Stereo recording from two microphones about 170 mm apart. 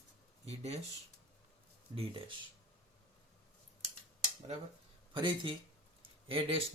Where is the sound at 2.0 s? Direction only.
30° right (ahead or behind).